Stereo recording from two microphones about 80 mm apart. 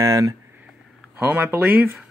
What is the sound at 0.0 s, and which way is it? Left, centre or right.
Speech, right.